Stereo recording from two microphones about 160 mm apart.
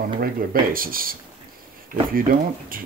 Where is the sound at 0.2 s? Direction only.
65° right (ahead or behind).